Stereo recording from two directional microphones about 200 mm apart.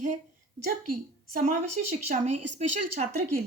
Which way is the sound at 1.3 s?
40° right (ahead or behind).